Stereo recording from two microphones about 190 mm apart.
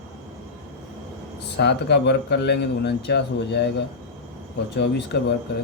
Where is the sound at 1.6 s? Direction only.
65° left (ahead or behind).